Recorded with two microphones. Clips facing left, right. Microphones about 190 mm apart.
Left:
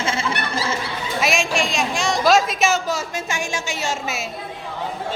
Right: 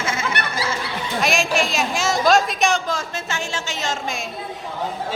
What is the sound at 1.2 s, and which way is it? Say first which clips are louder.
A woman's voice: right 1 dB; centre (ahead or behind).